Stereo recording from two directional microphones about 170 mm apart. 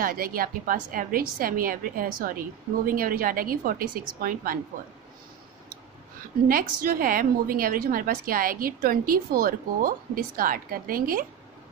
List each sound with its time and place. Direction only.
0.0 s a woman's voice: 55° right (ahead or behind)
6.5 s a woman's voice: 55° right (ahead or behind)